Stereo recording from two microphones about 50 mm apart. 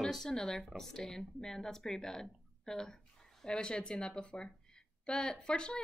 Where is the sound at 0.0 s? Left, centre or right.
Centre.